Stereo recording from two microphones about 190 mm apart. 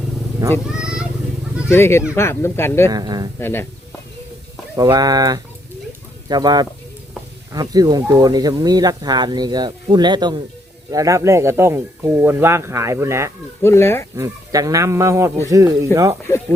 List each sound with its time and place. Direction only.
0.8 s vehicle: 5° right (ahead or behind)
1.7 s speech: 15° left (ahead or behind)
2.9 s speech: 20° right (ahead or behind)
3.4 s speech: 10° left (ahead or behind)
4.8 s speech: 20° right (ahead or behind)
13.6 s speech: 15° left (ahead or behind)
14.2 s speech: 20° right (ahead or behind)